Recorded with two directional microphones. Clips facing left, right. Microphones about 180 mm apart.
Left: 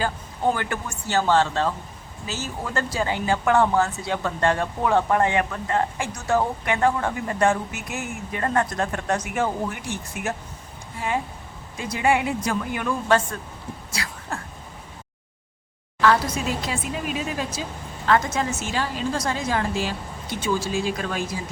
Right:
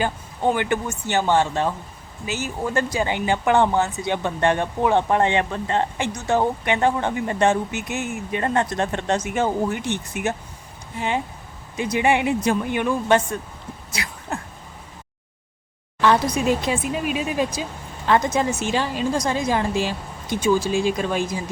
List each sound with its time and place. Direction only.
0.5 s speech: 20° right (ahead or behind)
13.9 s a sound: 20° right (ahead or behind)
16.0 s a woman's voice: 20° right (ahead or behind)